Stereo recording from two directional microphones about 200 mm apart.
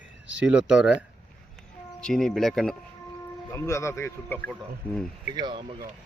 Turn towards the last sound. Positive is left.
turn(degrees=-25)  # may be behind; listen again after turning